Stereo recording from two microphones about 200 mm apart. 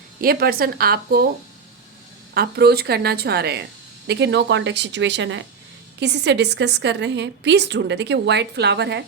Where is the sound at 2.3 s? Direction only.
50° right (ahead or behind).